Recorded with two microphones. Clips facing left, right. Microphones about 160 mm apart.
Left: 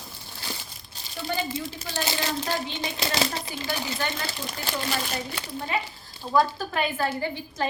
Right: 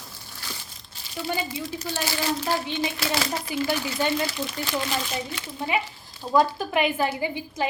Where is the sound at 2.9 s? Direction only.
20° left (ahead or behind).